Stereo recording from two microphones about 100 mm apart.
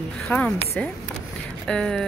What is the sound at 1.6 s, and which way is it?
Speech, 10° left (ahead or behind).